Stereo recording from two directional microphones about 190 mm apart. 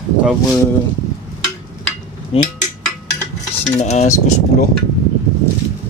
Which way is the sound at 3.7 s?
35° left (ahead or behind).